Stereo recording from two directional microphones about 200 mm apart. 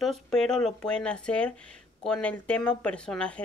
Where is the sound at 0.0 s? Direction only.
Centre (ahead or behind).